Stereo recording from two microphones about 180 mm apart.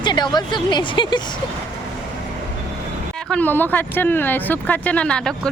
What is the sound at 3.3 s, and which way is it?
Speech, 10° left (ahead or behind).